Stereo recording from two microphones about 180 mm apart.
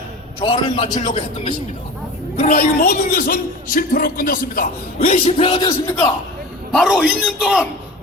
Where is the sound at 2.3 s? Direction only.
45° left (ahead or behind).